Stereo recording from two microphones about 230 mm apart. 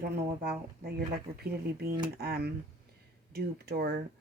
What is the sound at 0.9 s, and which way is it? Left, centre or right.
Speech, right.